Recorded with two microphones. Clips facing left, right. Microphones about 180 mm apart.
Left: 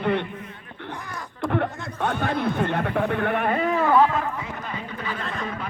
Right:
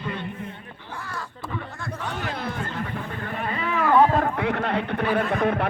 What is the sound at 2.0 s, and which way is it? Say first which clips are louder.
Speech: left 8 dB; 65° left (ahead or behind).